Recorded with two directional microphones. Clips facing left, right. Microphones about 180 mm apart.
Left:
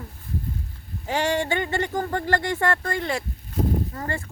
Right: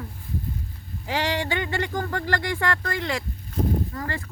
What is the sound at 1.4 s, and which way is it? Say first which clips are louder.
Speech: left 2 dB; 45° left (ahead or behind).